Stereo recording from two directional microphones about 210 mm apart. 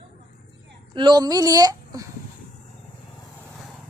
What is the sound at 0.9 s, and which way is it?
Speech, 20° right (ahead or behind).